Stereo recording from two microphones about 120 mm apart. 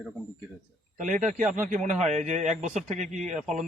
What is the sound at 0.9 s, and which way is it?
A man's voice, 90° right.